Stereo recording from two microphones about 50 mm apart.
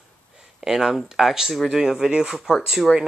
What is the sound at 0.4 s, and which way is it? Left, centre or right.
Speech, centre.